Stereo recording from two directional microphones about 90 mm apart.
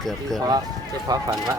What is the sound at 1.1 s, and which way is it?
Speech, 45° right (ahead or behind).